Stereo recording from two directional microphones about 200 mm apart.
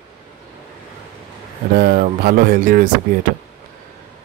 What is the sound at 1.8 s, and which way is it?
Speech, 45° right (ahead or behind).